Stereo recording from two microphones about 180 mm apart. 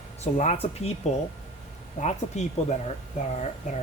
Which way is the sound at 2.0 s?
40° left (ahead or behind).